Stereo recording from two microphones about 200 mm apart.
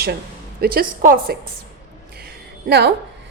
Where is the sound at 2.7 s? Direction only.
55° right (ahead or behind).